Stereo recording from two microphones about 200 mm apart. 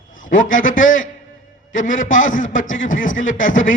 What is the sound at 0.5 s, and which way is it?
Speech, 40° left (ahead or behind).